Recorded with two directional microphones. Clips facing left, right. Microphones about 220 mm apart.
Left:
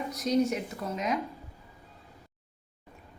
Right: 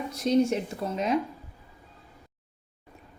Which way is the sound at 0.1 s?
30° right (ahead or behind).